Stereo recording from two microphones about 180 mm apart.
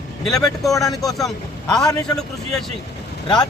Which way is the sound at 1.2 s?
5° left (ahead or behind).